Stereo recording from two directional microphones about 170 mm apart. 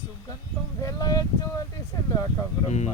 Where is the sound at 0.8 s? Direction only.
20° left (ahead or behind).